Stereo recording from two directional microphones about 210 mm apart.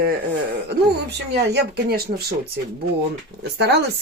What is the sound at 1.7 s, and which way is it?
Speech, 45° right (ahead or behind).